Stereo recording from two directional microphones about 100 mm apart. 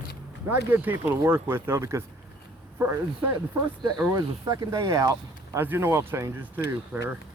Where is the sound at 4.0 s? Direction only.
35° right (ahead or behind).